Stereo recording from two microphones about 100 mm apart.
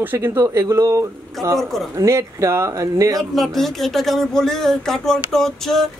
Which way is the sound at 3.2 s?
Centre (ahead or behind).